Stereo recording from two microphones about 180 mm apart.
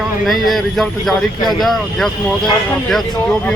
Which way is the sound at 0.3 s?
Centre (ahead or behind).